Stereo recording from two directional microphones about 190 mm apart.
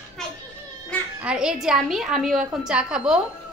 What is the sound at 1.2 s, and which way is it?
A woman's voice, 5° right (ahead or behind).